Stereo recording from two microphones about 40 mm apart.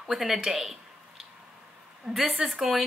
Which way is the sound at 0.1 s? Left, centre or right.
Centre.